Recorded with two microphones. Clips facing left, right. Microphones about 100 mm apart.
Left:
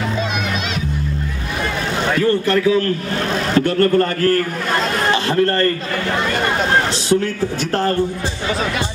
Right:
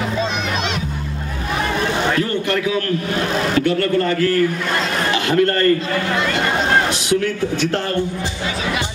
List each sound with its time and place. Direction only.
3.5 s a man's voice: 45° left (ahead or behind)